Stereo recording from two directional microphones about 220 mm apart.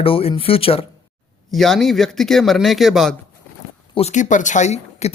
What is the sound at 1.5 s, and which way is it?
A man's voice, centre (ahead or behind).